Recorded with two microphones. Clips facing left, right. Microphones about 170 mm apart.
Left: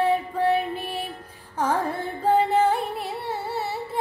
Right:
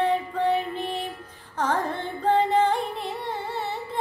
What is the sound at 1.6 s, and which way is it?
Carnatic music, 10° left (ahead or behind).